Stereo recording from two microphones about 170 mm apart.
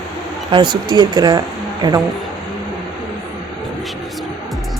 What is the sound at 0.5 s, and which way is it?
Speech, 25° right (ahead or behind).